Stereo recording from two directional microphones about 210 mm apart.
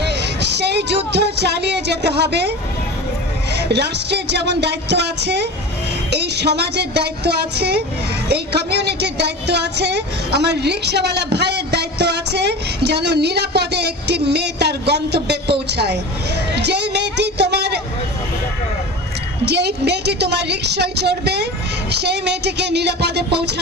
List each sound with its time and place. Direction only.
0.0 s music: 55° right (ahead or behind)
3.5 s a woman's voice: 55° right (ahead or behind)
16.5 s a sound: 55° right (ahead or behind)
19.4 s a woman's voice: 50° right (ahead or behind)